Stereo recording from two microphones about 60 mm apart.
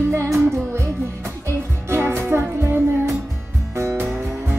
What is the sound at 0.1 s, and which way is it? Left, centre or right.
Music, right.